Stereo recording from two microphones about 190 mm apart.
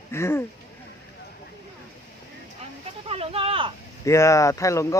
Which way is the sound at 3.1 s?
30° right (ahead or behind).